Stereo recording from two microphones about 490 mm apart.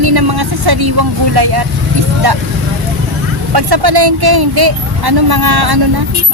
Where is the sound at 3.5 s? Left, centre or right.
Right.